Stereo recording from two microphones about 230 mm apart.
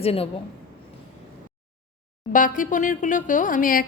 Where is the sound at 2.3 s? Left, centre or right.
Left.